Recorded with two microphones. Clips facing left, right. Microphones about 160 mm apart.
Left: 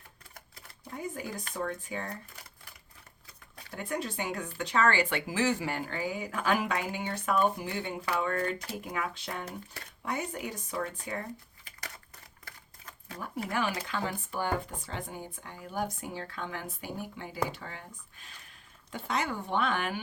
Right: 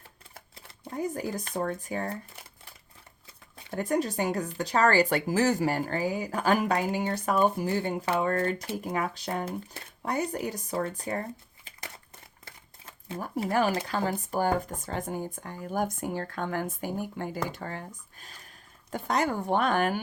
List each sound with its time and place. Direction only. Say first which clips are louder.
0.3 s speech: right 3 dB; 30° right (ahead or behind)
3.8 s speech: right 7 dB; 40° right (ahead or behind)
12.5 s speech: even; 25° right (ahead or behind); by 20.0 s 45° right (ahead or behind)